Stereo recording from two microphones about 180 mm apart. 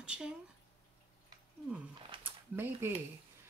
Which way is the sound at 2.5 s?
10° right (ahead or behind).